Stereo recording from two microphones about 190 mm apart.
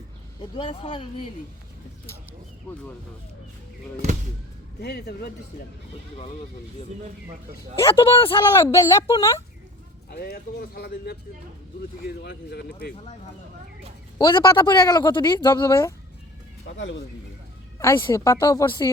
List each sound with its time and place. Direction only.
0.5 s speech: 25° left (ahead or behind)
4.8 s speech: 60° left (ahead or behind)
7.9 s speech: 25° left (ahead or behind)
8.5 s a woman's voice: 15° left (ahead or behind)
10.1 s speech: 55° left (ahead or behind)
14.2 s speech: 25° left (ahead or behind)
16.6 s speech: 75° left (ahead or behind)
17.7 s a woman's voice: 15° left (ahead or behind)